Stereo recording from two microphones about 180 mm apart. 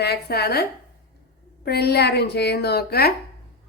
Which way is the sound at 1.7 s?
65° left (ahead or behind).